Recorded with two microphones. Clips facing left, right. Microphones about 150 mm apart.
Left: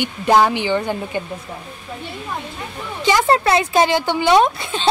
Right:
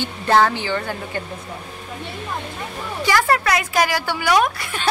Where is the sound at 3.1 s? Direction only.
25° left (ahead or behind).